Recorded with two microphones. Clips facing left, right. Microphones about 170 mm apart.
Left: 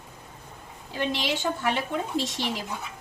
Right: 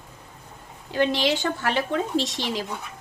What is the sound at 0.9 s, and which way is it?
Speech, 80° right.